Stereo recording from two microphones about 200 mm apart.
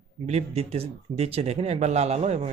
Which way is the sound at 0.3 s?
30° right (ahead or behind).